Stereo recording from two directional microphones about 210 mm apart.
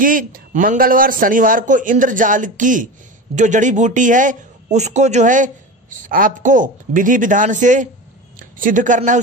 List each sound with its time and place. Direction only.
0.0 s a man's voice: 40° right (ahead or behind)